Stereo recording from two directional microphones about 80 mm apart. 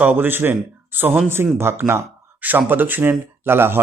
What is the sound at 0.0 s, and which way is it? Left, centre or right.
Speech, right.